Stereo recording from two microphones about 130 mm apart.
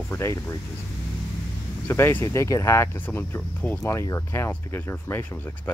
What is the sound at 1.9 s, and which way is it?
Speech, 20° left (ahead or behind).